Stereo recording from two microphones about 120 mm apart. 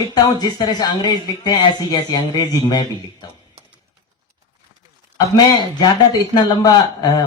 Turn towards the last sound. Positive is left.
turn(degrees=30)  # may be behind; listen again after turning